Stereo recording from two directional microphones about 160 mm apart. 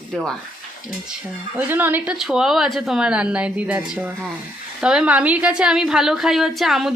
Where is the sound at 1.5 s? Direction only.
10° right (ahead or behind).